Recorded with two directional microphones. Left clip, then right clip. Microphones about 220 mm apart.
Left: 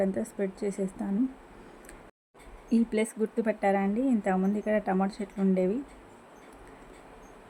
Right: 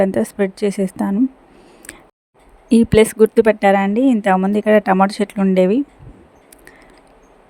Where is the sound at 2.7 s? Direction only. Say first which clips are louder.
Right 16 dB; 45° right (ahead or behind).